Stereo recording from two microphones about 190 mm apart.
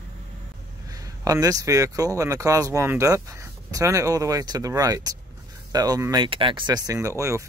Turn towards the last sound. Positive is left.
turn(degrees=-15)  # may be behind; listen again after turning